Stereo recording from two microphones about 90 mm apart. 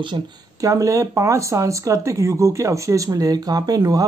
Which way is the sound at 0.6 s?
40° right (ahead or behind).